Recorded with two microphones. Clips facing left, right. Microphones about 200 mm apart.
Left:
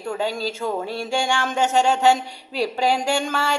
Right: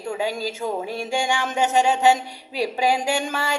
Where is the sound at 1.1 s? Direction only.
5° right (ahead or behind).